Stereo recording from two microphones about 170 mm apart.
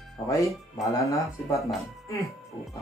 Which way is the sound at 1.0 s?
20° left (ahead or behind).